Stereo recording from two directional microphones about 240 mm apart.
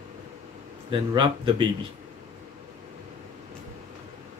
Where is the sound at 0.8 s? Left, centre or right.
Right.